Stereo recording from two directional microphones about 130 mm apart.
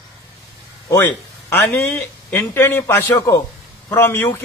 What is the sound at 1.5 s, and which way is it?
A man's voice, 15° left (ahead or behind).